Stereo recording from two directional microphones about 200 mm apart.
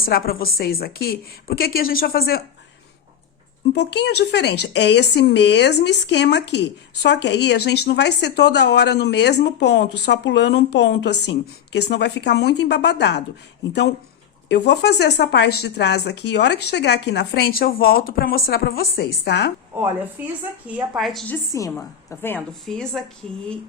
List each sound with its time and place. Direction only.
0.0 s a woman's voice: 50° left (ahead or behind)
3.8 s a woman's voice: 60° left (ahead or behind)
14.5 s a woman's voice: 55° left (ahead or behind)
19.7 s a woman's voice: 15° right (ahead or behind)
21.5 s a woman's voice: 15° left (ahead or behind)